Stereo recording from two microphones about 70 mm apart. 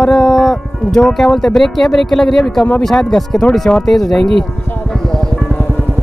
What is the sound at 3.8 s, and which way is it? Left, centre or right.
Speech, centre.